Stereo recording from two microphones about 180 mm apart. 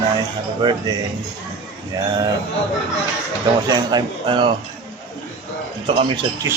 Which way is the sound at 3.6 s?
25° right (ahead or behind).